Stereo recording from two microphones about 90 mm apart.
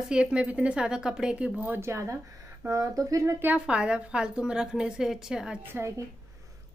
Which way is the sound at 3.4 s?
15° right (ahead or behind).